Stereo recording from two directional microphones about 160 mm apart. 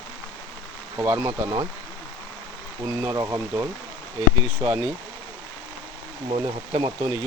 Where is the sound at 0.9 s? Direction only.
15° right (ahead or behind).